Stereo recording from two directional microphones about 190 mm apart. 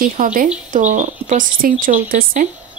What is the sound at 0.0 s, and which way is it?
Speech, 45° right (ahead or behind).